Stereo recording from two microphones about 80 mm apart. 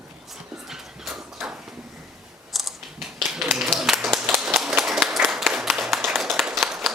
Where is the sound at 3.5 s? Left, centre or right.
Centre.